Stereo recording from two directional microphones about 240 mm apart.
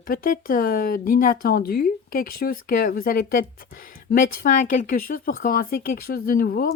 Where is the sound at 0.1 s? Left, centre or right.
Left.